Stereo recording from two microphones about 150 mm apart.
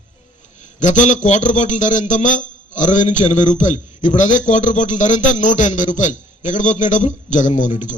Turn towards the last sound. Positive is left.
turn(degrees=55)  # may be behind; listen again after turning